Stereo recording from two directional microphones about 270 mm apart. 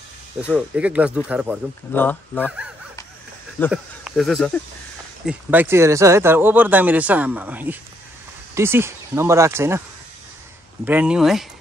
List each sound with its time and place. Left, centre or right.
0.5 s speech: centre
1.9 s speech: centre
3.5 s speech: centre
10.9 s speech: centre